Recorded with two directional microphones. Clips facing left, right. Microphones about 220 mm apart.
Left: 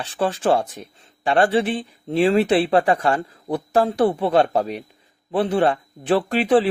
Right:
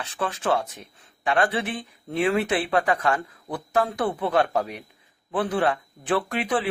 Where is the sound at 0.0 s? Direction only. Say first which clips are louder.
Left 6 dB; 30° left (ahead or behind).